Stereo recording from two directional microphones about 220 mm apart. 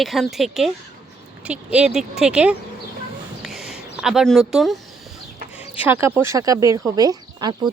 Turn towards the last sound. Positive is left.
turn(degrees=-20)  # may be behind; listen again after turning